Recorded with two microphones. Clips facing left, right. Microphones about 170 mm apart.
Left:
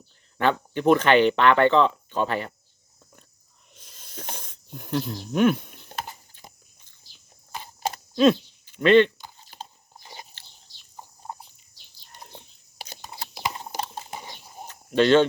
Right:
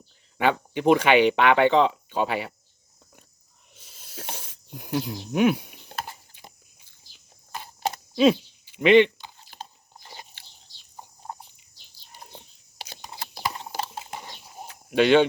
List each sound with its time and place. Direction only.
0.3 s speech: 15° right (ahead or behind)
3.8 s a sound: 5° right (ahead or behind)
8.1 s speech: 10° right (ahead or behind)
12.1 s whispering: 10° right (ahead or behind)
13.1 s a sound: 10° left (ahead or behind)
14.1 s mechanisms: 15° left (ahead or behind)
14.5 s cricket: 10° right (ahead or behind)